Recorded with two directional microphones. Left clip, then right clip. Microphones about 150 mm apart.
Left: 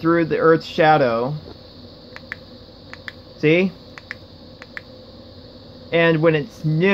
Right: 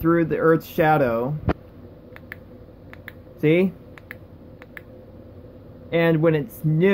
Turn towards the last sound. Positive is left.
turn(degrees=-15)  # may be behind; listen again after turning